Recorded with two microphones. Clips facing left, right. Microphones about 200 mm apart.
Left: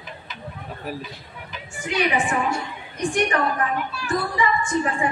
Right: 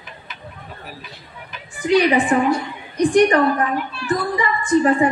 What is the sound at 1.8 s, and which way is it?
A woman's voice, 35° right (ahead or behind).